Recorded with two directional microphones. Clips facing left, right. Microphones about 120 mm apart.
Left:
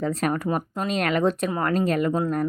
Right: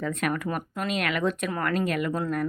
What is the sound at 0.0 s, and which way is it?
A woman's voice, 35° left (ahead or behind).